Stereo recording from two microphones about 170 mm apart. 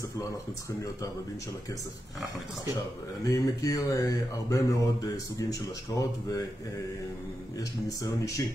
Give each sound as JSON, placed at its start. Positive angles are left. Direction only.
{"t": 3.3, "sound": "mantra", "side_deg": 20}
{"t": 7.5, "sound": "mantra", "side_deg": 20}